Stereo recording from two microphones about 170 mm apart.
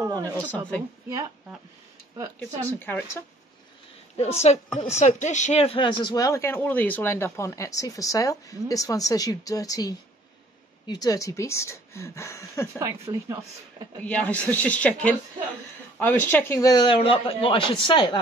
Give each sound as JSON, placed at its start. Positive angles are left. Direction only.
{"t": 0.0, "sound": "a sound", "side_deg": -15}
{"t": 0.4, "sound": "speech", "side_deg": 10}
{"t": 2.8, "sound": "speech", "side_deg": 10}
{"t": 4.2, "sound": "a woman's voice", "side_deg": 40}
{"t": 12.7, "sound": "speech", "side_deg": -20}
{"t": 14.0, "sound": "speech", "side_deg": 10}